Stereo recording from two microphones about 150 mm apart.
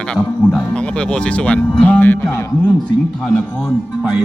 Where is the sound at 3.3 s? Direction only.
5° left (ahead or behind).